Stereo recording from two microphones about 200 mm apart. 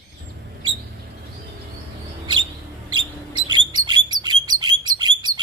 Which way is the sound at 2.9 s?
25° right (ahead or behind).